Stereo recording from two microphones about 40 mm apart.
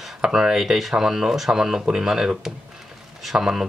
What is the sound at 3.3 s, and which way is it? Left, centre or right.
Speech, centre.